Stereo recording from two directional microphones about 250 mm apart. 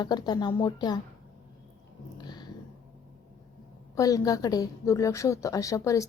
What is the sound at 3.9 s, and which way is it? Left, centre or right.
A woman's voice, centre.